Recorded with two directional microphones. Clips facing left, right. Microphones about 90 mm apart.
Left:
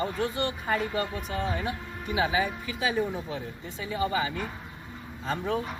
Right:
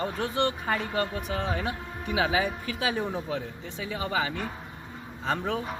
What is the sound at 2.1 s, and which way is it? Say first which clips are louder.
Speech: right 1 dB; 90° right.